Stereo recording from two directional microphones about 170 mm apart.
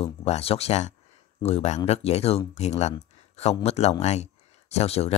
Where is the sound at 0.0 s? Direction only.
35° left (ahead or behind).